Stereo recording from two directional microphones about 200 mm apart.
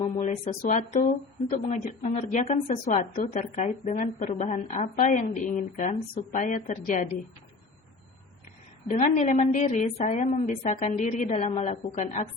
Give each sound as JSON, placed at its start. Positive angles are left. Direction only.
{"t": 0.0, "sound": "a woman's voice", "side_deg": 35}
{"t": 8.9, "sound": "a woman's voice", "side_deg": 35}